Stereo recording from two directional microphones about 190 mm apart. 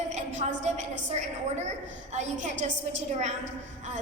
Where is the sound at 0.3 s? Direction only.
40° right (ahead or behind).